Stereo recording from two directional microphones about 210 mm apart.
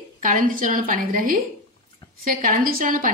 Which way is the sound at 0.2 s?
40° right (ahead or behind).